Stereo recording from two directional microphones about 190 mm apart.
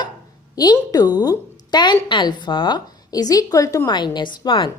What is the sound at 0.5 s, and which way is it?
A woman's voice, 20° left (ahead or behind).